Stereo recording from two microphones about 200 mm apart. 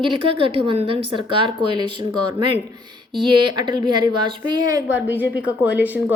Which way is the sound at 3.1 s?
20° right (ahead or behind).